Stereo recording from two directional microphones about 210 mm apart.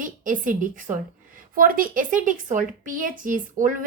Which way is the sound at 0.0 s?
40° right (ahead or behind).